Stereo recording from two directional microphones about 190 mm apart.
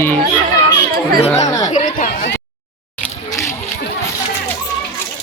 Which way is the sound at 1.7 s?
45° left (ahead or behind).